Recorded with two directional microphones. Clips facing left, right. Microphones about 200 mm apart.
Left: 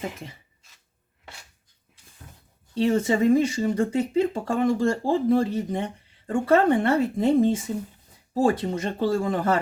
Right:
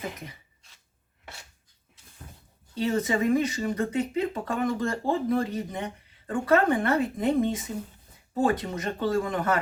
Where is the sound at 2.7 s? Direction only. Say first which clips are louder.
Left 4 dB; 30° left (ahead or behind).